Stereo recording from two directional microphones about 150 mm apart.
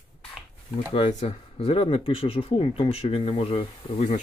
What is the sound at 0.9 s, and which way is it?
Speech, 40° left (ahead or behind).